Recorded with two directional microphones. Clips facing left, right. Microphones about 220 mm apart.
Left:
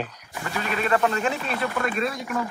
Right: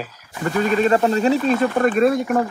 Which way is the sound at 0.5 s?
40° right (ahead or behind).